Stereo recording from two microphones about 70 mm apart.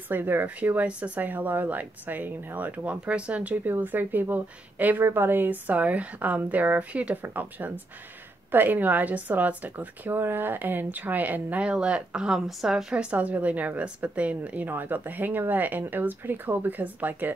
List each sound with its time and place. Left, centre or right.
0.1 s speech: right
3.7 s speech: right; by 12.8 s centre
12.9 s speech: centre